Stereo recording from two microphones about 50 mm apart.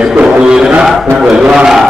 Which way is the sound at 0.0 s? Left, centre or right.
Centre.